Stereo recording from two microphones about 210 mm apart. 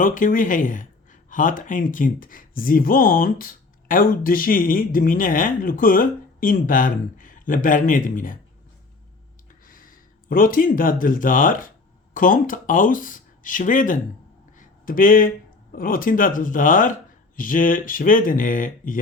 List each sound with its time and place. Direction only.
0.0 s speech: 40° left (ahead or behind)
9.6 s speech: 40° left (ahead or behind)
14.6 s a sound: 40° left (ahead or behind)
15.7 s speech: 40° left (ahead or behind)